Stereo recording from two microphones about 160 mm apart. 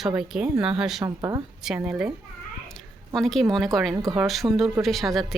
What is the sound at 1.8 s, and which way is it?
A woman's voice, 5° right (ahead or behind).